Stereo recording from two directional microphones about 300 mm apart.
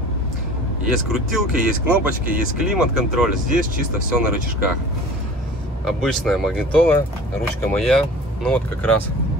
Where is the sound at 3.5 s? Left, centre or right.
Right.